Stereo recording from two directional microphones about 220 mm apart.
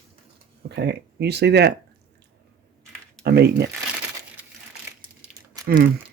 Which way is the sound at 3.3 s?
45° right (ahead or behind).